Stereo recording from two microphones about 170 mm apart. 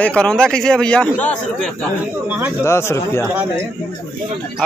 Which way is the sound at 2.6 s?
15° left (ahead or behind).